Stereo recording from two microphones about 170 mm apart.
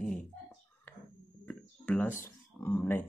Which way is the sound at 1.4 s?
10° left (ahead or behind).